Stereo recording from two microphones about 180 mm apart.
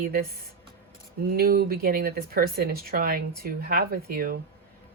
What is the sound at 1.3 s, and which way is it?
Speech, 55° right (ahead or behind).